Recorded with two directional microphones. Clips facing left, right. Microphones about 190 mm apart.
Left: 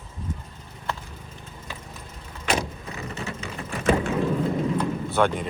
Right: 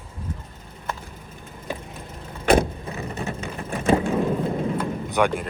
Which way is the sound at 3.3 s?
50° right (ahead or behind).